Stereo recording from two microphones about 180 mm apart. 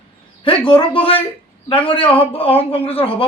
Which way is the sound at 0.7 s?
30° left (ahead or behind).